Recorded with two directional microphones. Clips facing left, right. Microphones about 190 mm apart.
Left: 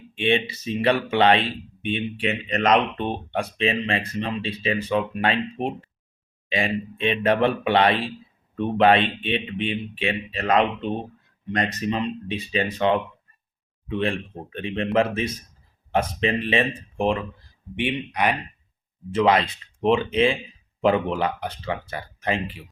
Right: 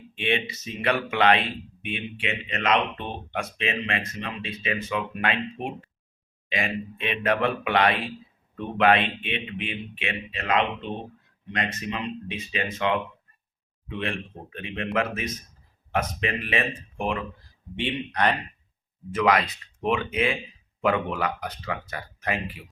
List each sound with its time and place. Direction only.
0.2 s speech: 30° left (ahead or behind)
14.5 s speech: 30° left (ahead or behind)
17.7 s speech: 15° left (ahead or behind)
19.1 s speech: 25° left (ahead or behind)